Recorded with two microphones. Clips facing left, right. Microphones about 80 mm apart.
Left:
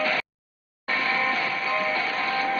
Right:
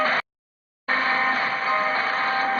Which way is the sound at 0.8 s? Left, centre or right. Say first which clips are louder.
Right 3 dB; right.